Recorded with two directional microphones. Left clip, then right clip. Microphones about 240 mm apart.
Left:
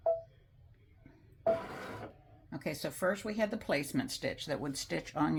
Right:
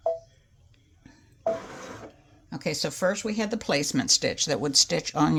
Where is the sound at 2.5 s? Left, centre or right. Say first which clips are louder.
Right 9 dB; right.